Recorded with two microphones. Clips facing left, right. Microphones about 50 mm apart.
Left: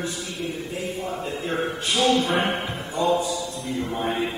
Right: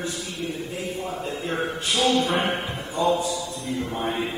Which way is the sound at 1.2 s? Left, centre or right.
Centre.